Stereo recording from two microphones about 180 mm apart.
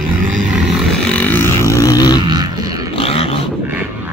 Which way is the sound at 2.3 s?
20° right (ahead or behind).